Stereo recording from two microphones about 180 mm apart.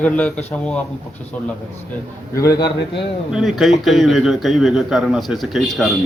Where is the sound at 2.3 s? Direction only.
20° left (ahead or behind).